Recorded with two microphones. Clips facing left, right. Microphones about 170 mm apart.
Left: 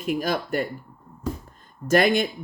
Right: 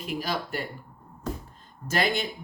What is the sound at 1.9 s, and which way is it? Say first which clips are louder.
Speech: left 8 dB; 50° left (ahead or behind).